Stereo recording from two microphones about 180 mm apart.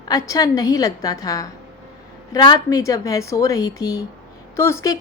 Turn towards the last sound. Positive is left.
turn(degrees=15)  # may be behind; listen again after turning